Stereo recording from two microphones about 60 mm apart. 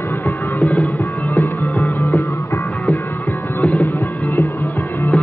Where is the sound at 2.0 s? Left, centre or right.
Left.